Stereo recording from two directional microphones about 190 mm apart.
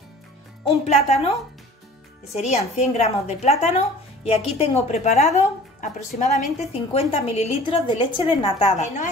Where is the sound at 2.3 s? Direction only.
35° left (ahead or behind).